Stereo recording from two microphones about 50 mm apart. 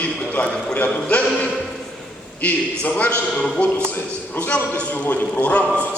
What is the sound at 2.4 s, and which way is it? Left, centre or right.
A man's voice, left.